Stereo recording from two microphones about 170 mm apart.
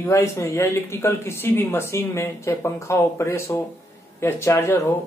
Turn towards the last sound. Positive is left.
turn(degrees=15)  # may be behind; listen again after turning